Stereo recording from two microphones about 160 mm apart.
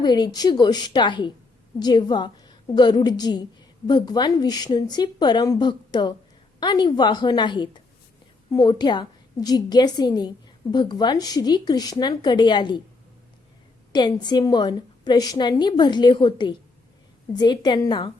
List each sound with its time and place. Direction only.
0.0 s a woman's voice: 25° left (ahead or behind)
13.9 s a woman's voice: 25° left (ahead or behind)